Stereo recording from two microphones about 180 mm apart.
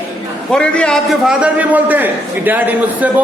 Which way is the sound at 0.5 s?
5° left (ahead or behind).